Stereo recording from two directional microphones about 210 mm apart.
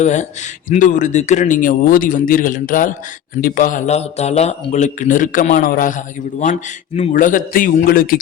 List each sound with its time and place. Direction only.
0.0 s speech: 35° left (ahead or behind)